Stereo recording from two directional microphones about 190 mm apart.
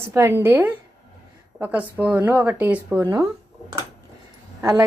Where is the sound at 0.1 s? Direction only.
15° right (ahead or behind).